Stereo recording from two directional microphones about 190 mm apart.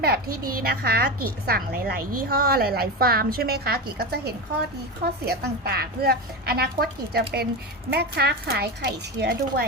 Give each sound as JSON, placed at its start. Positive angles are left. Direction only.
{"t": 0.6, "sound": "a woman's voice", "side_deg": -55}